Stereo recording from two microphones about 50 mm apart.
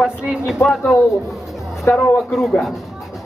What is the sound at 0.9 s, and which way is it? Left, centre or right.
A man's voice, centre.